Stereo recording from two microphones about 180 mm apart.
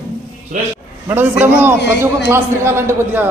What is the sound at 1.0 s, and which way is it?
A man's voice, 10° right (ahead or behind).